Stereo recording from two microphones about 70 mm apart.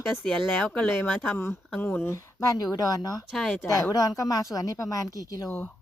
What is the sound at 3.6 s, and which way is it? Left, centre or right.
Speech, left.